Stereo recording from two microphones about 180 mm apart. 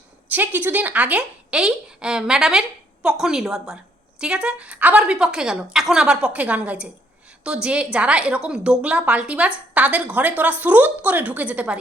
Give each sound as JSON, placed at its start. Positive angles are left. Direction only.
{"t": 0.3, "sound": "a woman's voice", "side_deg": -10}